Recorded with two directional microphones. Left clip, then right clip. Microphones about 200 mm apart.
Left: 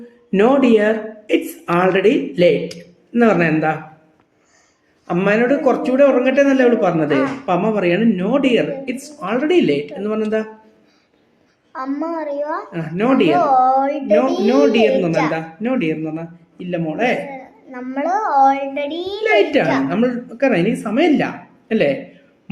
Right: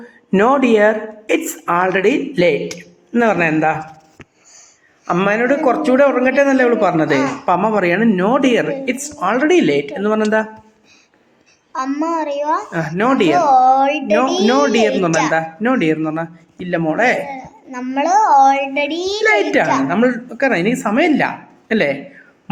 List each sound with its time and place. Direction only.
0.3 s speech: 20° right (ahead or behind)
5.0 s a man's voice: 15° right (ahead or behind)
11.7 s a man's voice: 20° right (ahead or behind)
19.3 s a man's voice: 20° right (ahead or behind)